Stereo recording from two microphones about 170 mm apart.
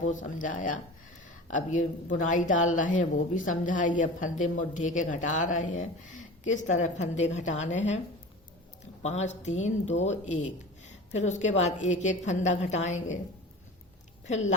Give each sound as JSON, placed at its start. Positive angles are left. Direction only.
{"t": 0.0, "sound": "a woman's voice", "side_deg": 50}
{"t": 9.0, "sound": "a woman's voice", "side_deg": 45}
{"t": 14.3, "sound": "a woman's voice", "side_deg": 45}